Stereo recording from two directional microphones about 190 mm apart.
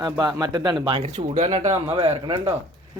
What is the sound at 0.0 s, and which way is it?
Speech, 20° right (ahead or behind).